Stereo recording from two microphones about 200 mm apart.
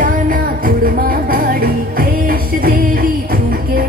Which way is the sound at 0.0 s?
45° right (ahead or behind).